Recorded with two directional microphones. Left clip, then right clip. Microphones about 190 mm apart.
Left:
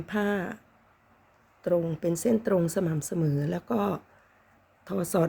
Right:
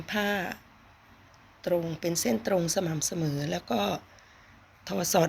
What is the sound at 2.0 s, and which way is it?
A woman's voice, 45° left (ahead or behind).